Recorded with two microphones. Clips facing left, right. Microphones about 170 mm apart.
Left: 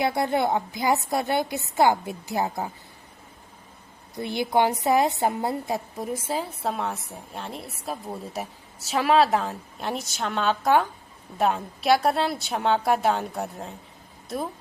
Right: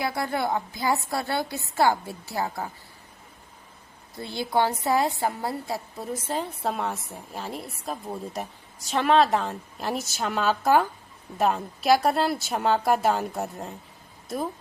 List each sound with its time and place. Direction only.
0.0 s a woman's voice: 20° left (ahead or behind)
4.1 s a woman's voice: 20° left (ahead or behind); by 13.7 s centre (ahead or behind)